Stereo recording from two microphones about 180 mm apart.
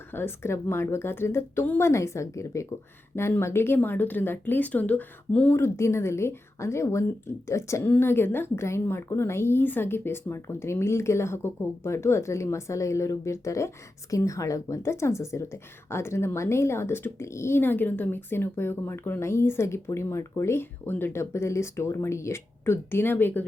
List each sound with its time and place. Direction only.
0.1 s a woman's voice: 10° left (ahead or behind)